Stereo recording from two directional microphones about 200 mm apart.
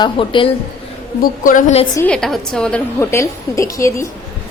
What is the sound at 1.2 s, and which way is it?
Speech, 40° left (ahead or behind).